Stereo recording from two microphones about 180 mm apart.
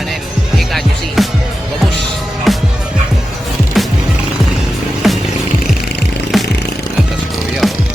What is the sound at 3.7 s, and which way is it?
Skateboard, centre (ahead or behind).